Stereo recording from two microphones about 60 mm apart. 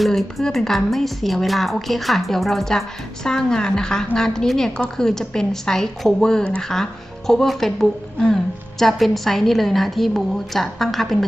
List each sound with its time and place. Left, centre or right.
0.0 s a woman's voice: centre